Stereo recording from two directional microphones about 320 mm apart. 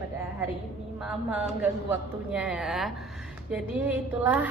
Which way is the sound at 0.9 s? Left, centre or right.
Centre.